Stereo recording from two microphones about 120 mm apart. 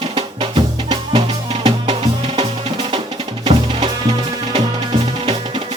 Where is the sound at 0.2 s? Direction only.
45° right (ahead or behind).